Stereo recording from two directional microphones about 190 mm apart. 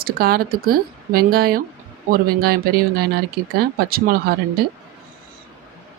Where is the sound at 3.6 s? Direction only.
50° right (ahead or behind).